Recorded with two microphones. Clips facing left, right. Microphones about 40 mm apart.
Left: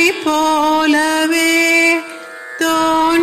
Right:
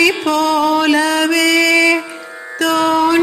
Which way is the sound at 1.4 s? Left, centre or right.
Left.